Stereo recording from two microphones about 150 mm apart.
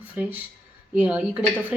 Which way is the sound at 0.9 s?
10° right (ahead or behind).